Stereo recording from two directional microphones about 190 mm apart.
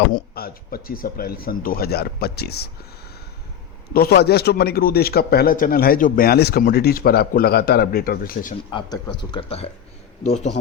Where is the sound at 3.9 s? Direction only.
55° left (ahead or behind).